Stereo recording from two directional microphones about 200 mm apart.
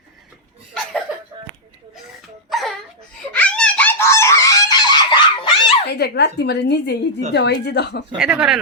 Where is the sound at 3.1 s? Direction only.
5° left (ahead or behind); by 5.8 s 25° left (ahead or behind).